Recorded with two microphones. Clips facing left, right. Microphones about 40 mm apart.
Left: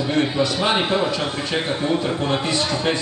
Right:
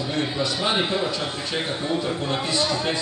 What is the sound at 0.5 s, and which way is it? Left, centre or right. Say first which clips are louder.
A man's voice: left 2 dB; left.